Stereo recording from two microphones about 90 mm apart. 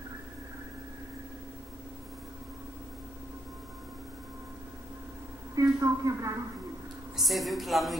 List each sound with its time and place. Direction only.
5.5 s a woman's voice: 40° right (ahead or behind)
7.2 s a man's voice: centre (ahead or behind)